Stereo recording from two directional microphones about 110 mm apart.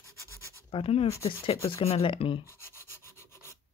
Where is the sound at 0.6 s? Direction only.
60° left (ahead or behind).